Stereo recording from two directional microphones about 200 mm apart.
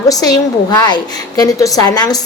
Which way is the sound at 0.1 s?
20° left (ahead or behind).